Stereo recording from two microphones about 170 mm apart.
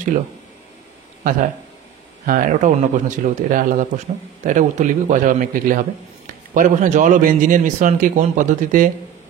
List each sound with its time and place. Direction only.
2.2 s speech: 50° right (ahead or behind)